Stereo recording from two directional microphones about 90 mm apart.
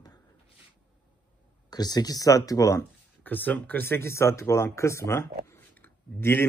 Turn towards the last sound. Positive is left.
turn(degrees=25)  # may be behind; listen again after turning